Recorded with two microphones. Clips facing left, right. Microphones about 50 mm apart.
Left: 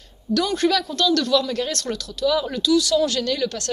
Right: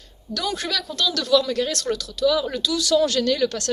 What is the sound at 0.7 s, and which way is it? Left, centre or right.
Speech, left.